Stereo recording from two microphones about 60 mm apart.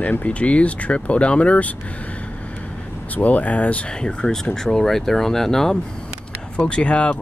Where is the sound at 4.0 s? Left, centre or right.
Centre.